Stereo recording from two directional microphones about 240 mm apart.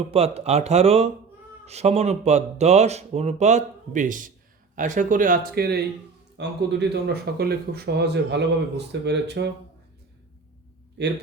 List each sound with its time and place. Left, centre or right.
0.1 s speech: right